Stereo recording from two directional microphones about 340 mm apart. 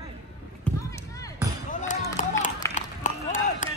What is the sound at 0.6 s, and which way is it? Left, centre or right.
Basketball bounce, centre.